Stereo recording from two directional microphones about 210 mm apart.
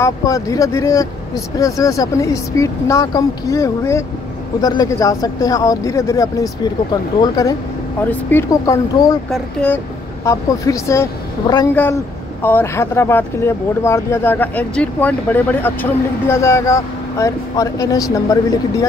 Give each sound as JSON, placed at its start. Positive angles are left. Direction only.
{"t": 0.0, "sound": "speech", "side_deg": 15}
{"t": 9.3, "sound": "speech", "side_deg": 5}